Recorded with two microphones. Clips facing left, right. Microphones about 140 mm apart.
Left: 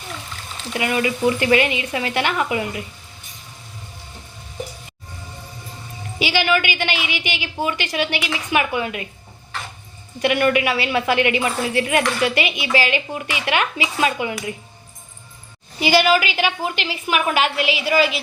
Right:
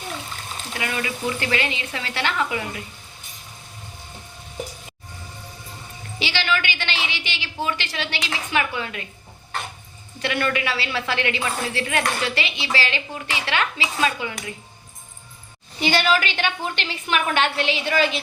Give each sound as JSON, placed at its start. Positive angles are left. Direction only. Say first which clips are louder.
{"t": 0.8, "sound": "a woman's voice", "louder": "left 7 dB", "side_deg": 20}
{"t": 6.1, "sound": "a woman's voice", "louder": "left 5 dB", "side_deg": 15}
{"t": 10.2, "sound": "a woman's voice", "louder": "left 6 dB", "side_deg": 15}
{"t": 15.8, "sound": "a woman's voice", "louder": "left 4 dB", "side_deg": 10}